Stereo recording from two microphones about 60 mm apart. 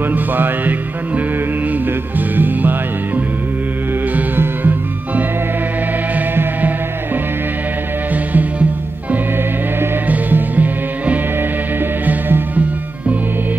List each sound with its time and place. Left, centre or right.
0.1 s music: right
4.1 s music: right
8.1 s music: right
10.0 s music: right